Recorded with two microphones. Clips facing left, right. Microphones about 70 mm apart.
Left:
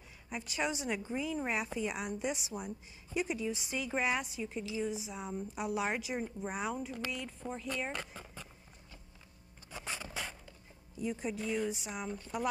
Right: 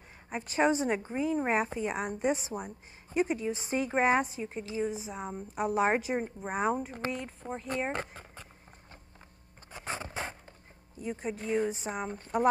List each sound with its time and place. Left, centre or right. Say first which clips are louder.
0.3 s a woman's voice: right 9 dB; right
9.7 s music: right 5 dB; right
11.0 s a woman's voice: right 1 dB; right